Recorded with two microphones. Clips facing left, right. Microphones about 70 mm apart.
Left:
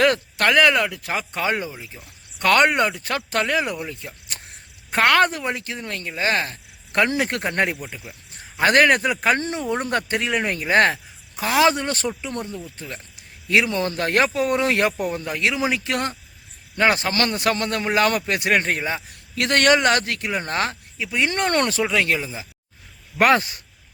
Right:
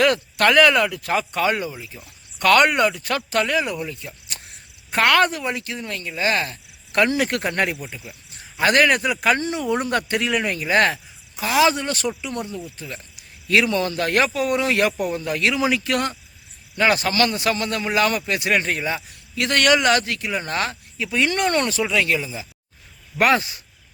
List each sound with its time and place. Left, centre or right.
0.0 s speech: left
0.4 s speech: centre; by 13.2 s left
13.5 s a man's voice: left
18.8 s speech: left
19.4 s speech: left
21.0 s speech: centre
21.2 s speech: left
21.5 s a man's voice: left